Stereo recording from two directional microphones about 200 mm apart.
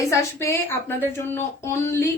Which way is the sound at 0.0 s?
15° left (ahead or behind).